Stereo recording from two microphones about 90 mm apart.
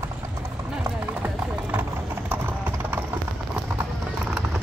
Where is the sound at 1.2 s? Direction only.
20° right (ahead or behind).